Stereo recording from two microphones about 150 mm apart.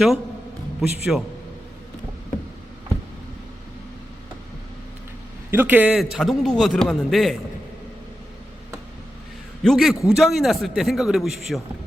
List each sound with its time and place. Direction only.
0.8 s a man's voice: centre (ahead or behind)
5.5 s a man's voice: 15° right (ahead or behind)
9.6 s a man's voice: centre (ahead or behind)